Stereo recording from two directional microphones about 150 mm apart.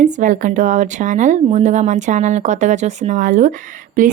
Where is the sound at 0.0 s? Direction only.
55° right (ahead or behind).